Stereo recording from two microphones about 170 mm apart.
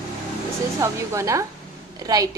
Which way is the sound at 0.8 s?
15° right (ahead or behind).